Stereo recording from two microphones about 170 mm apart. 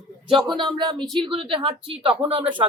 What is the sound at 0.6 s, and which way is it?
Speech, 25° right (ahead or behind).